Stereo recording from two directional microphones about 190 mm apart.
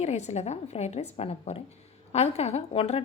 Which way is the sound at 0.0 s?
35° left (ahead or behind).